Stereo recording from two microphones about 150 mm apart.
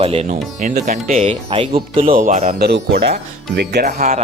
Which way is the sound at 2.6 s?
90° right.